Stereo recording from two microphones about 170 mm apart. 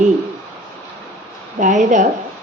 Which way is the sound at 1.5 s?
50° right (ahead or behind).